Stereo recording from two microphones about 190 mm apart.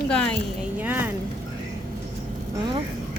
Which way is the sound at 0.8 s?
10° right (ahead or behind).